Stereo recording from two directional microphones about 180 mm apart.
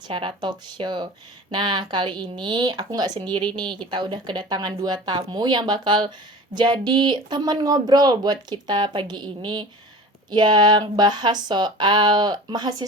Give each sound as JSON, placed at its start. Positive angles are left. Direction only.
{"t": 0.1, "sound": "speech", "side_deg": -25}